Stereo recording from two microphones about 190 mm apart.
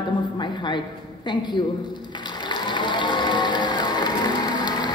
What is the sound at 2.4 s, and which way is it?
Music, 25° left (ahead or behind).